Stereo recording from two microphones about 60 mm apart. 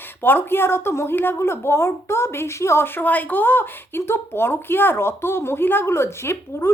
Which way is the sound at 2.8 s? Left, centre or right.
Left.